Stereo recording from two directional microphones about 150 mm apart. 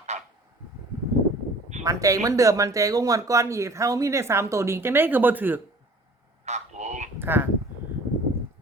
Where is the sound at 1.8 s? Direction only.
20° right (ahead or behind).